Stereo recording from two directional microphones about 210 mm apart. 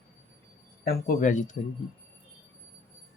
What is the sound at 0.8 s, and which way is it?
Speech, 45° left (ahead or behind).